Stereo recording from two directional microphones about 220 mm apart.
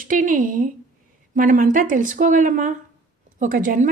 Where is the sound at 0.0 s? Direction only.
40° right (ahead or behind).